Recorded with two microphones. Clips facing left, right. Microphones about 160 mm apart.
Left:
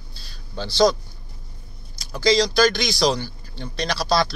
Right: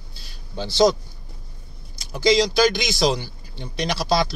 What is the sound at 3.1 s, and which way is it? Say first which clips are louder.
Speech: left 2 dB; 10° right (ahead or behind).